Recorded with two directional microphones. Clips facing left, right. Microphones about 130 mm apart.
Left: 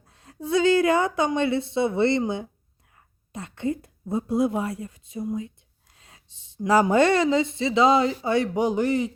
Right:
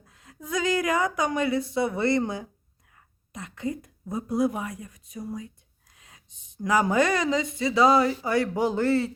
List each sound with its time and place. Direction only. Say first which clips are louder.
0.0 s speech: left 8 dB; 30° left (ahead or behind)